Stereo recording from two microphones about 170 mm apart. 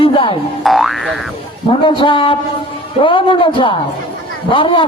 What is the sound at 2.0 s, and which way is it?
A man's voice, 30° left (ahead or behind).